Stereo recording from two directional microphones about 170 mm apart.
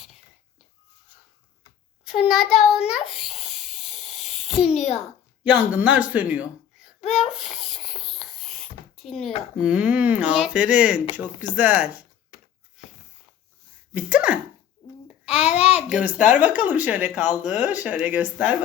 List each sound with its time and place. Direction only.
2.2 s a sound: centre (ahead or behind)
9.0 s speech: centre (ahead or behind)
13.9 s speech: 5° right (ahead or behind)
15.0 s babbling: 5° right (ahead or behind)
15.4 s a child's voice: 40° left (ahead or behind)
15.9 s speech: 5° right (ahead or behind)